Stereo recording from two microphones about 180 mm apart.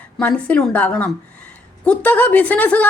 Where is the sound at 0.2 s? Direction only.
5° left (ahead or behind).